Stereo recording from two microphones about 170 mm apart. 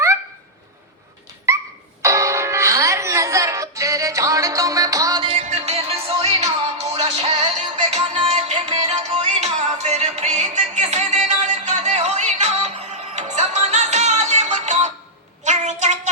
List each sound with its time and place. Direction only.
1.5 s dog: 20° right (ahead or behind)
2.0 s music: 20° right (ahead or behind); by 14.8 s 40° right (ahead or behind)
15.4 s a sound: 45° right (ahead or behind)